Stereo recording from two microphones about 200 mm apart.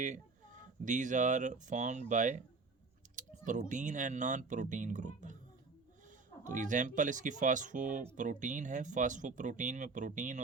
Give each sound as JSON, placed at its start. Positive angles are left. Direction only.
{"t": 0.9, "sound": "speech", "side_deg": -40}
{"t": 6.4, "sound": "speech", "side_deg": -40}